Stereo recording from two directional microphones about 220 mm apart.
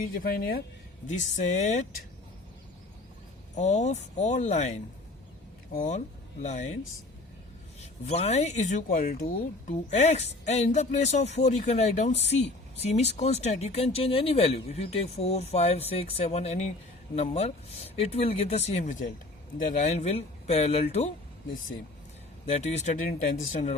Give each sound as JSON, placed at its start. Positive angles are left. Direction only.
{"t": 0.1, "sound": "speech", "side_deg": 40}
{"t": 3.5, "sound": "speech", "side_deg": 30}
{"t": 7.8, "sound": "speech", "side_deg": 30}
{"t": 22.4, "sound": "speech", "side_deg": 30}